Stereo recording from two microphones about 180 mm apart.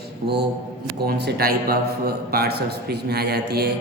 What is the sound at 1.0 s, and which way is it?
A man's voice, 60° right (ahead or behind).